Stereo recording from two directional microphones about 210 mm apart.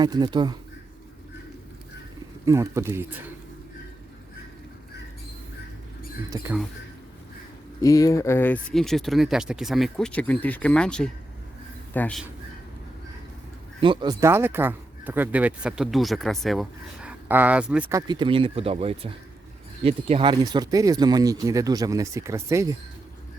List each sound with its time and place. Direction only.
0.0 s speech: 20° right (ahead or behind)
2.4 s speech: 15° right (ahead or behind)
6.3 s speech: 15° right (ahead or behind)
7.8 s speech: 15° left (ahead or behind)
13.8 s speech: 20° right (ahead or behind)
18.1 s speech: 25° right (ahead or behind)